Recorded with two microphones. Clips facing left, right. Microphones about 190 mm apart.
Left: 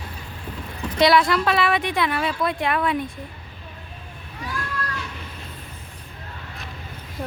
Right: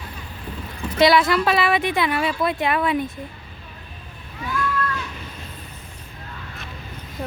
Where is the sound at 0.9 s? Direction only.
Centre (ahead or behind).